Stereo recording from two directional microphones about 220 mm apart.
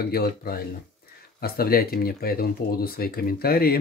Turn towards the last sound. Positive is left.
turn(degrees=45)  # may be behind; listen again after turning